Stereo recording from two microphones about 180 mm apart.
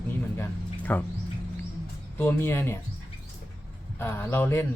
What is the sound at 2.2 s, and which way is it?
Speech, 15° left (ahead or behind).